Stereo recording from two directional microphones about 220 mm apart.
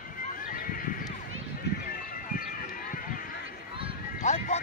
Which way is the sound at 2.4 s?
40° left (ahead or behind).